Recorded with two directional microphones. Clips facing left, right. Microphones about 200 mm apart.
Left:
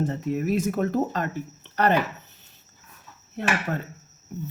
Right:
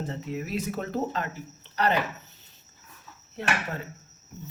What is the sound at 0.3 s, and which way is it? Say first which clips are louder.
Speech: left 7 dB; 45° left (ahead or behind).